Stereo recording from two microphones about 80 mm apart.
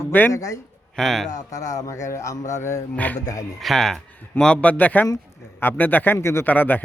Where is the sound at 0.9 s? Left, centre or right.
Centre.